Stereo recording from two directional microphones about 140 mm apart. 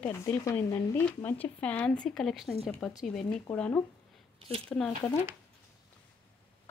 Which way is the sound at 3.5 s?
15° left (ahead or behind).